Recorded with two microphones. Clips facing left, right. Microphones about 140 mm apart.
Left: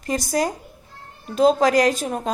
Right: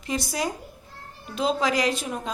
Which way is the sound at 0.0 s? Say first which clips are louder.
Left 5 dB; 45° left (ahead or behind).